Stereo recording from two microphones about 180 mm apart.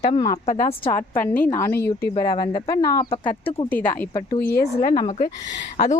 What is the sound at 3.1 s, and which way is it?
Speech, 30° left (ahead or behind).